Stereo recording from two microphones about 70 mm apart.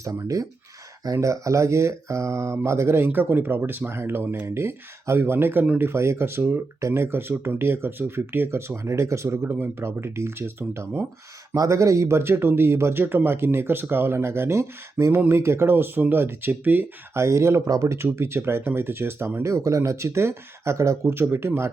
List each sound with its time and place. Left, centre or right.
0.0 s speech: right
11.5 s speech: right
17.2 s speech: right
21.2 s speech: right